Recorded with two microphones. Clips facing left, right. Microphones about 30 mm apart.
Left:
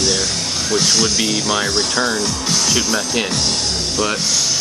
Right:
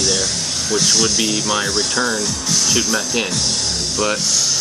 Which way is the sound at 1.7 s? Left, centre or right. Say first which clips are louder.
Left 1 dB; centre.